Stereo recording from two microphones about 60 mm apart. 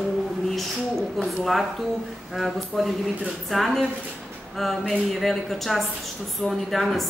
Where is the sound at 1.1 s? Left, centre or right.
Centre.